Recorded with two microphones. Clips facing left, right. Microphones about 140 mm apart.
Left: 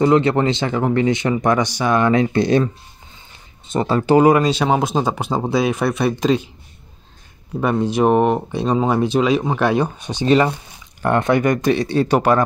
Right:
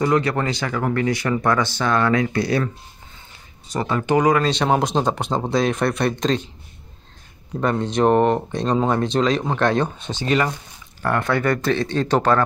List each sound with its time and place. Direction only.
0.0 s speech: 25° left (ahead or behind)
4.4 s speech: 5° left (ahead or behind)
7.6 s speech: 5° left (ahead or behind)
10.2 s speech: 30° left (ahead or behind); by 12.4 s 10° left (ahead or behind)